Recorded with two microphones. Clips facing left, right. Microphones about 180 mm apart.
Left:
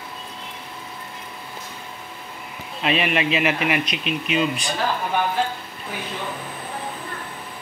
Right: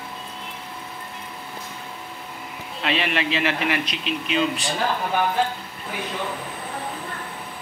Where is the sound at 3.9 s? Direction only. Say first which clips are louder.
Left 2 dB; 30° right (ahead or behind).